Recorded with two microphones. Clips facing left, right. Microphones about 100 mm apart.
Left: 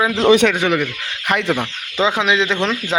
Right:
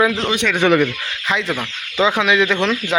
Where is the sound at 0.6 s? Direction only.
5° left (ahead or behind).